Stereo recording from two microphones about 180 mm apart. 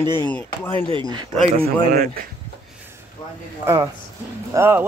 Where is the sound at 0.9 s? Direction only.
25° right (ahead or behind).